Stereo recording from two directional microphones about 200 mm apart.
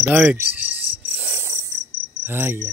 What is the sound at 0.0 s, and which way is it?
Cricket, 10° right (ahead or behind).